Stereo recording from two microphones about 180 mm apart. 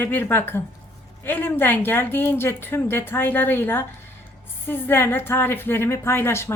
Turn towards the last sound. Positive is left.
turn(degrees=15)  # may be behind; listen again after turning